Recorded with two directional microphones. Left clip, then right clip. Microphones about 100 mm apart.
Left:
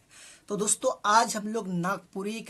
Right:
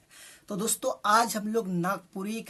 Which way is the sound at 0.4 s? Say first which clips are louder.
Left 3 dB; 20° left (ahead or behind).